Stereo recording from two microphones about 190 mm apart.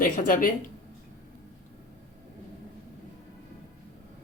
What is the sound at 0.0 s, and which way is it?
Speech, 45° left (ahead or behind).